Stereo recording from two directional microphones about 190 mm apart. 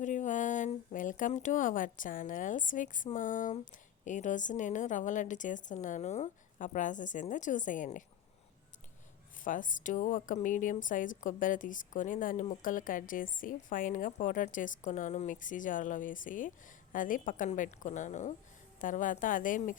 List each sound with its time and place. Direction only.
0.0 s a woman's voice: 40° left (ahead or behind)
9.4 s a woman's voice: 45° left (ahead or behind)